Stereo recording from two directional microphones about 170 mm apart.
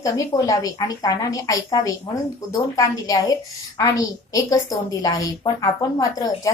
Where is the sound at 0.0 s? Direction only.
20° left (ahead or behind).